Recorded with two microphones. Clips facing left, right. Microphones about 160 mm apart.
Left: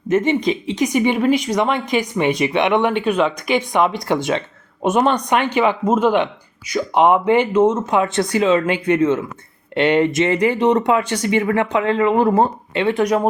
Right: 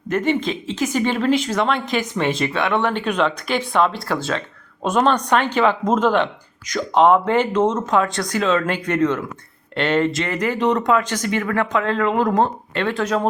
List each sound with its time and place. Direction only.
0.1 s speech: 20° left (ahead or behind)
8.0 s speech: 25° left (ahead or behind)
8.3 s speech: 10° left (ahead or behind)